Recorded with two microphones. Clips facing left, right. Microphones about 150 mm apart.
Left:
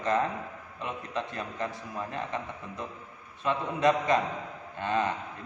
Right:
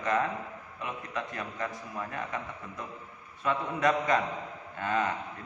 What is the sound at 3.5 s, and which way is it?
A man's voice, 25° left (ahead or behind).